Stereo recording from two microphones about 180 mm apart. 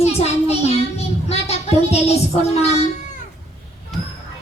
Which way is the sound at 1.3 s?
35° left (ahead or behind).